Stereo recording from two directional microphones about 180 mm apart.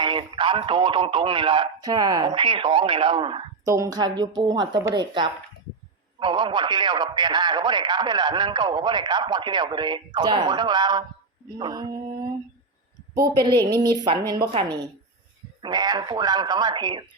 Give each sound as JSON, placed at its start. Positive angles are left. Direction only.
{"t": 0.0, "sound": "speech", "side_deg": -25}
{"t": 13.1, "sound": "speech", "side_deg": -25}